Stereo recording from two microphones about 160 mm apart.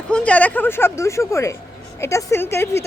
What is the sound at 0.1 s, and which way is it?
Speech, 10° left (ahead or behind).